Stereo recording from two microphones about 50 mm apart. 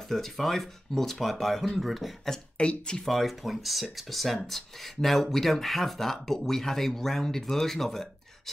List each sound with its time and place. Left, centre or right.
0.1 s speech: centre
2.3 s speech: left
3.1 s speech: centre